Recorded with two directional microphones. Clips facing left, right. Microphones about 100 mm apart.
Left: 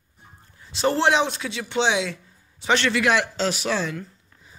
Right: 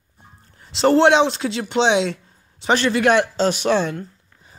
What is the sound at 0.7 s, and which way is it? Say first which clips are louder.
Speech: right 6 dB; 60° right (ahead or behind).